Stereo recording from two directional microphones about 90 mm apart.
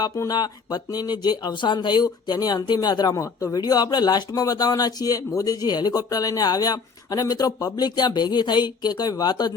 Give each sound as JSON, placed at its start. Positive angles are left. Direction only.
{"t": 0.2, "sound": "speech", "side_deg": 45}